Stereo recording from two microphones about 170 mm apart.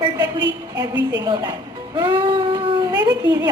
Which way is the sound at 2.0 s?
30° right (ahead or behind).